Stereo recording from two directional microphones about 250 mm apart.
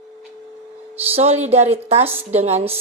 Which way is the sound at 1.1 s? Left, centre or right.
Right.